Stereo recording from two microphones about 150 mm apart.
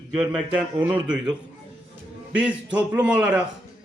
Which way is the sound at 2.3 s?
10° right (ahead or behind).